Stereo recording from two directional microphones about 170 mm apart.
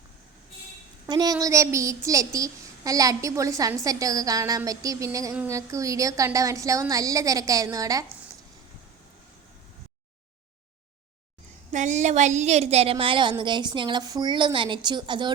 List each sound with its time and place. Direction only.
1.0 s a woman's voice: 25° right (ahead or behind)
11.7 s a woman's voice: 45° right (ahead or behind); by 15.3 s 25° right (ahead or behind)